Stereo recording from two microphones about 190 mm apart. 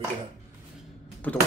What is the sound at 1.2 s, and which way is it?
Speech, 10° left (ahead or behind).